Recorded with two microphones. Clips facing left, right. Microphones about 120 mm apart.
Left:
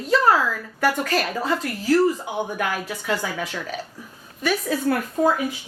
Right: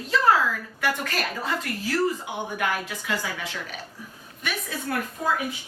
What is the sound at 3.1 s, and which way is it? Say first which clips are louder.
A woman's voice: left 5 dB; 40° left (ahead or behind).